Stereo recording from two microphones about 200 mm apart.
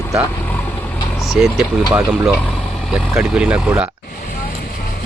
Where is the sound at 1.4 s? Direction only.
Centre (ahead or behind).